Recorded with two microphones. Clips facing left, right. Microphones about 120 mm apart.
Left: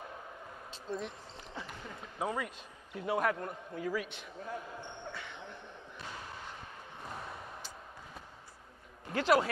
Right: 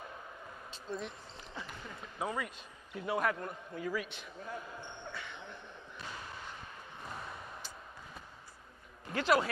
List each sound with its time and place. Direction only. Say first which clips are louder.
1.0 s speech: left 1 dB; 45° left (ahead or behind)
4.4 s basketball bounce: left 2 dB; 40° left (ahead or behind)
7.0 s a sound: left 1 dB; 40° left (ahead or behind)
9.0 s speech: left 2 dB; 45° left (ahead or behind)